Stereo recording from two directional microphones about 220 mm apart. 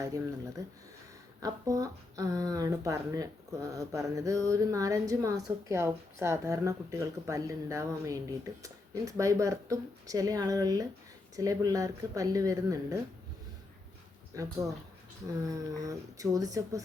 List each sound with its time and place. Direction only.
0.0 s speech: 15° right (ahead or behind)
14.3 s speech: 15° right (ahead or behind)